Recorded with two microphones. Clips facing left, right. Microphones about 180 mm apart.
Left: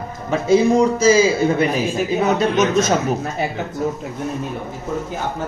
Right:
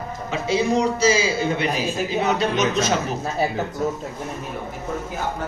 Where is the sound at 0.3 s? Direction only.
50° left (ahead or behind).